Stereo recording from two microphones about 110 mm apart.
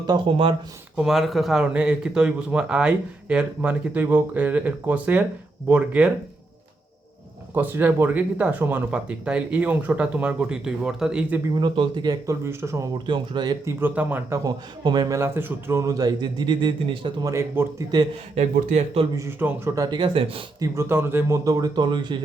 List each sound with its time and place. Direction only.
0.3 s speech: 55° right (ahead or behind)
0.9 s speech: centre (ahead or behind)
7.5 s speech: 20° right (ahead or behind)
11.5 s speech: 45° right (ahead or behind)
12.2 s speech: 25° right (ahead or behind)
13.1 s speech: 45° right (ahead or behind)
13.7 s speech: 20° right (ahead or behind)
14.3 s a man's voice: 30° right (ahead or behind)
15.4 s a man's voice: 20° right (ahead or behind); by 17.1 s 50° right (ahead or behind)
17.2 s speech: 25° right (ahead or behind)
18.3 s speech: 90° right
19.4 s speech: 15° right (ahead or behind)
19.7 s a man's voice: 35° right (ahead or behind)
20.6 s speech: 25° right (ahead or behind); by 22.2 s 45° right (ahead or behind)